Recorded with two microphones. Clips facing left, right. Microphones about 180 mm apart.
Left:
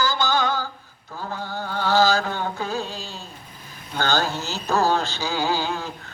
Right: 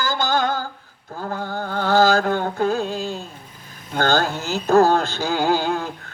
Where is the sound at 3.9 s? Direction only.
50° right (ahead or behind).